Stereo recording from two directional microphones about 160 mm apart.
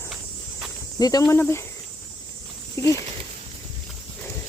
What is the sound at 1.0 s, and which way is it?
Speech, 20° left (ahead or behind).